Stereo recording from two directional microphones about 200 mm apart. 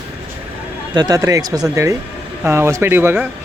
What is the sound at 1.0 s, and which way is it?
A man's voice, 20° right (ahead or behind).